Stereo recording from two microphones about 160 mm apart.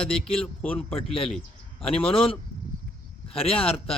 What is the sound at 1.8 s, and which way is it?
Speech, 35° left (ahead or behind).